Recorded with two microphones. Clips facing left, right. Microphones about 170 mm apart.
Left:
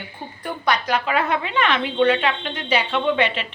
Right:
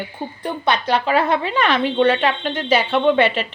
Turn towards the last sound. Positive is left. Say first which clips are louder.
# right 5 dB
turn(degrees=-40)  # may be behind; listen again after turning